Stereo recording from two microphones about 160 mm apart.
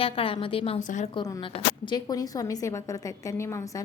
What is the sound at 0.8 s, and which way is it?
Speech, 50° left (ahead or behind).